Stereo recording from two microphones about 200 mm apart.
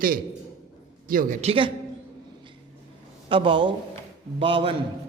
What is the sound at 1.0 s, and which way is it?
Speech, 45° right (ahead or behind).